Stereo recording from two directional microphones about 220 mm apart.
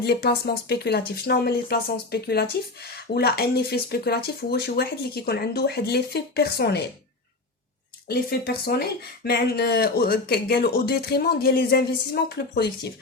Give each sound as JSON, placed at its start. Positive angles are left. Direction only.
{"t": 0.0, "sound": "speech", "side_deg": 45}
{"t": 8.0, "sound": "speech", "side_deg": 45}